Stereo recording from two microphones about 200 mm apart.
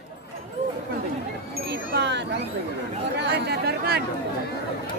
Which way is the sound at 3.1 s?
60° right (ahead or behind).